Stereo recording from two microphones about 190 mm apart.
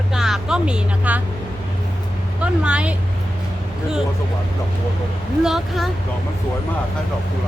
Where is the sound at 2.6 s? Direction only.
5° right (ahead or behind).